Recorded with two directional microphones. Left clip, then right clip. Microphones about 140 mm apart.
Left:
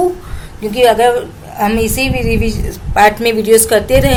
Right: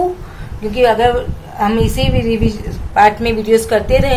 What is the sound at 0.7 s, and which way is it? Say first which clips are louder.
A woman's voice: left 2 dB; 45° left (ahead or behind).